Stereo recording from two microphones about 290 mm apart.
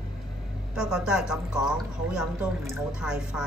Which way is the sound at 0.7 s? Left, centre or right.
Centre.